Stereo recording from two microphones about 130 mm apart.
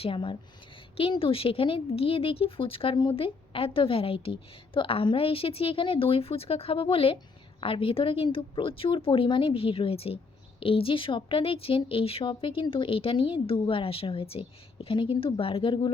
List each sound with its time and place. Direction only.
0.0 s a woman's voice: 40° left (ahead or behind)